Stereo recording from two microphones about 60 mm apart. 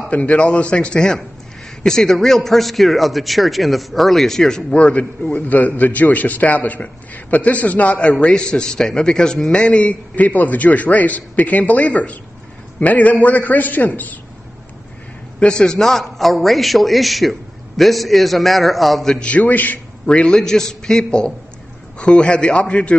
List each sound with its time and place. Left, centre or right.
0.1 s a man's voice: left
15.4 s a man's voice: centre
19.1 s a man's voice: left
20.1 s a man's voice: centre